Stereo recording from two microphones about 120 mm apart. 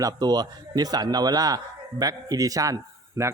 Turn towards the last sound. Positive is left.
turn(degrees=-25)  # may be behind; listen again after turning